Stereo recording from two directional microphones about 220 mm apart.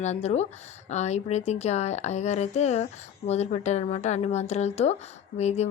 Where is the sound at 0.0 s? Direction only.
30° left (ahead or behind).